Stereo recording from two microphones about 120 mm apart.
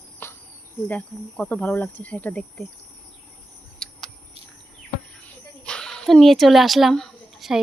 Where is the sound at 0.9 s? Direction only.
10° left (ahead or behind).